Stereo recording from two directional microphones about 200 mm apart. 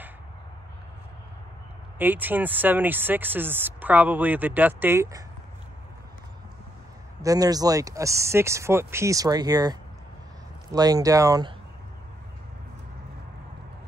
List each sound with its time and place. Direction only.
2.0 s speech: 10° right (ahead or behind)
7.2 s speech: 15° right (ahead or behind)